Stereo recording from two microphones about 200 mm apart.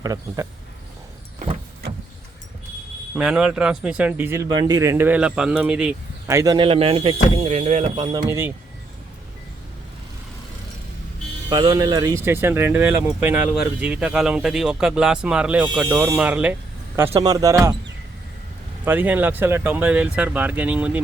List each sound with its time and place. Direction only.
0.0 s speech: 15° right (ahead or behind)
3.2 s speech: 5° right (ahead or behind)
6.2 s speech: 15° right (ahead or behind)
8.3 s speech: 10° right (ahead or behind)
11.4 s speech: 20° right (ahead or behind)
17.1 s speech: 20° right (ahead or behind)
18.9 s speech: 10° right (ahead or behind)